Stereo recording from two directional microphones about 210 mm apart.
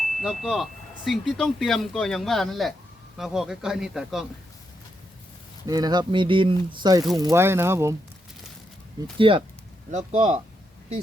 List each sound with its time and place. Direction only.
0.2 s speech: centre (ahead or behind)
5.6 s speech: 20° right (ahead or behind)
9.1 s speech: 25° right (ahead or behind)